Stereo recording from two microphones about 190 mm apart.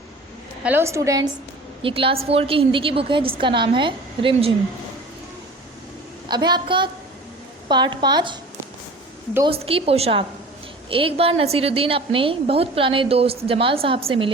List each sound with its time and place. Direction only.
0.6 s a woman's voice: 10° right (ahead or behind)
1.8 s a woman's voice: 30° right (ahead or behind)
6.2 s a woman's voice: 20° right (ahead or behind)
9.5 s a woman's voice: 30° right (ahead or behind)